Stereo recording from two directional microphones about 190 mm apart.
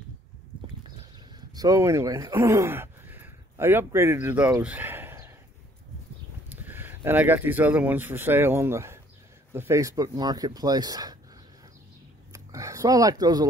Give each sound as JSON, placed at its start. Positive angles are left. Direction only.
{"t": 1.5, "sound": "speech", "side_deg": -20}
{"t": 6.5, "sound": "speech", "side_deg": -10}
{"t": 12.3, "sound": "a sound", "side_deg": -15}